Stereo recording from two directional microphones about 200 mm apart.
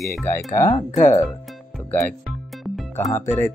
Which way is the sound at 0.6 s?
20° left (ahead or behind).